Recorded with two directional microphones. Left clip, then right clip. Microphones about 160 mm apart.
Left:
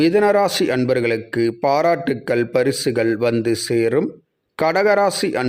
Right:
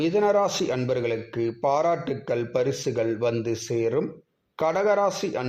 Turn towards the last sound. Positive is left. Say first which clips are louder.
# left 7 dB
turn(degrees=45)  # may be behind; listen again after turning